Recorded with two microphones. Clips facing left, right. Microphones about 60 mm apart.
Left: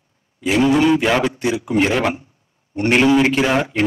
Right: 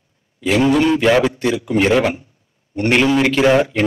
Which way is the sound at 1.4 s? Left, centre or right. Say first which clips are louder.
Right 2 dB; centre.